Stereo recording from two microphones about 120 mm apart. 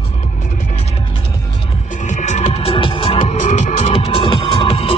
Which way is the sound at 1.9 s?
90° left.